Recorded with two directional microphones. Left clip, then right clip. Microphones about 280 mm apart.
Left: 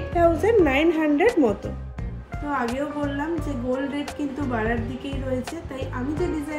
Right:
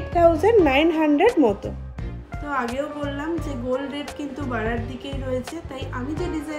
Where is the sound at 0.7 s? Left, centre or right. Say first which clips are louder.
Right 2 dB; centre.